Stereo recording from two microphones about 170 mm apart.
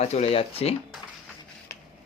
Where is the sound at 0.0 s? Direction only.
40° left (ahead or behind).